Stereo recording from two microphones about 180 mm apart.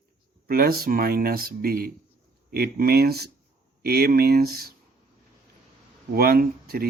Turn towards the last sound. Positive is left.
turn(degrees=-55)  # may be behind; listen again after turning